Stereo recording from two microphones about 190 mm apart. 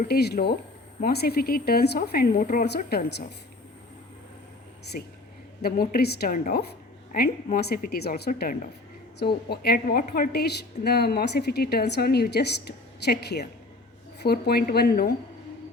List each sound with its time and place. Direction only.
0.1 s a woman's voice: 55° left (ahead or behind)
4.9 s a woman's voice: 50° left (ahead or behind)